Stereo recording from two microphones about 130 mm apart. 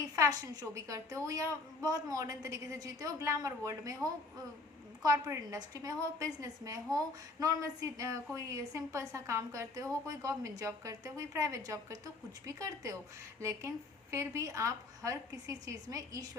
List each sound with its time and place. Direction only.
0.2 s a woman's voice: 25° right (ahead or behind)